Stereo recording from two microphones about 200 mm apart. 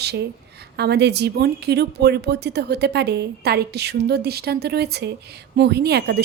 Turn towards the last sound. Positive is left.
turn(degrees=-55)  # may be behind; listen again after turning